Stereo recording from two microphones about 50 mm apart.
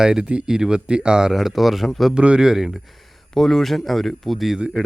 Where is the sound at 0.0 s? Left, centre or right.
Centre.